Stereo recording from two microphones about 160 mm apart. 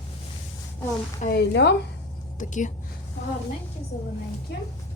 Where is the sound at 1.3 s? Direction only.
90° left.